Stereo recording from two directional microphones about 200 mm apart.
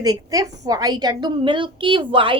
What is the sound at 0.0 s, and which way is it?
A woman's voice, 20° right (ahead or behind).